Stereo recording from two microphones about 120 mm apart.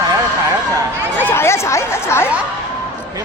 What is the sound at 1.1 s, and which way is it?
Speech, 20° left (ahead or behind).